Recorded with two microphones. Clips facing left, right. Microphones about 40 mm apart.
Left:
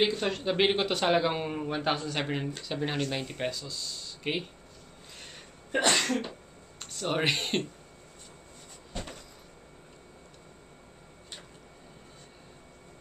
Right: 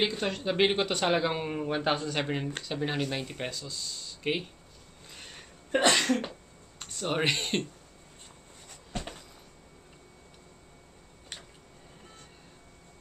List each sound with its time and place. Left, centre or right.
0.0 s speech: centre
5.7 s cough: right
6.8 s speech: centre